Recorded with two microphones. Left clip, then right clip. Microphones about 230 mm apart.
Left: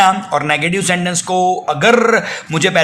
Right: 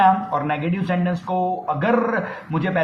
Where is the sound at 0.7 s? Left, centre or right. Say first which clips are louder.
Left 8 dB; left.